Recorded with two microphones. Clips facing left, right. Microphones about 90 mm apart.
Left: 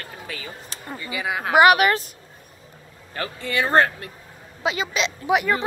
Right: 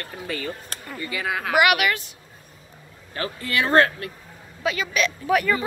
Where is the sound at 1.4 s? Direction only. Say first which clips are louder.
Left 5 dB; 30° left (ahead or behind).